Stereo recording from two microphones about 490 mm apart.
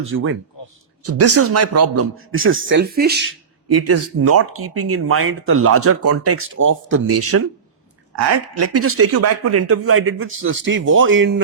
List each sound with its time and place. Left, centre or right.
0.0 s a man's voice: right